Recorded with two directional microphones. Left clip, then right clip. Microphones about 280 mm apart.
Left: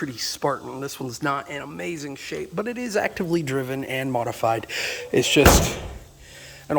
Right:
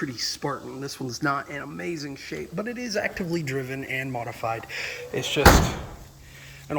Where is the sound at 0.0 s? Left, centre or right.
Centre; by 4.8 s left.